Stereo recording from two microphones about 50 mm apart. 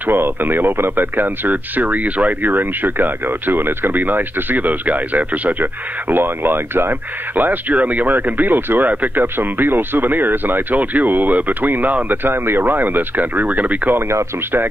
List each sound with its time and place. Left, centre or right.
0.0 s speech: right